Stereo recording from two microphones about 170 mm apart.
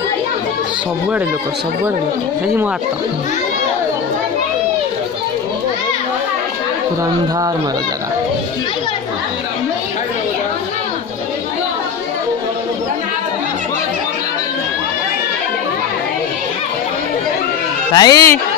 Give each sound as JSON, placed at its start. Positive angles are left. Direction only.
{"t": 17.9, "sound": "speech", "side_deg": 20}